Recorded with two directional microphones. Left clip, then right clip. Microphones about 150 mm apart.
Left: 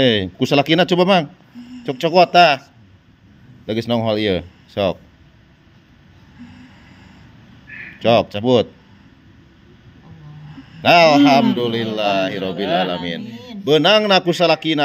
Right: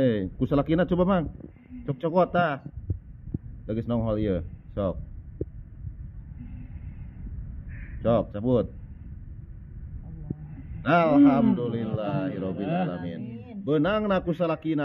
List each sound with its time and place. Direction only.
0.0 s speech: 30° left (ahead or behind)
3.6 s speech: 35° left (ahead or behind)
8.0 s speech: 30° left (ahead or behind)
10.8 s a man's voice: 35° left (ahead or behind)